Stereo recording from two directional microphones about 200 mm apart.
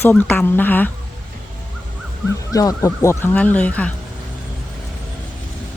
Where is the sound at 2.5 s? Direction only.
15° left (ahead or behind).